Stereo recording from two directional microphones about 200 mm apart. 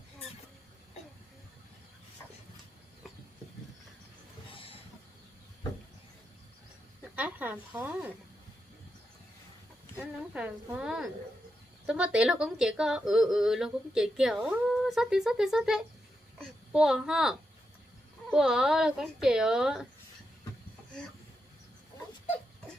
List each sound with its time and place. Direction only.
4.5 s vehicle: 25° left (ahead or behind)
7.2 s speech: 10° right (ahead or behind)
10.0 s a woman's voice: 5° right (ahead or behind)